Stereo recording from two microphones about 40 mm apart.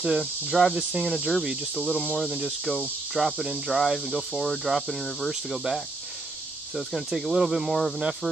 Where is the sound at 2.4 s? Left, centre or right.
Centre.